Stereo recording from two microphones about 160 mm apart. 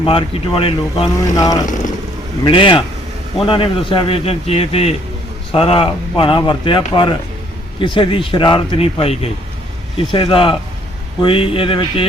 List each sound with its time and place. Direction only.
0.0 s speech: 35° left (ahead or behind)
1.4 s speech: 25° left (ahead or behind)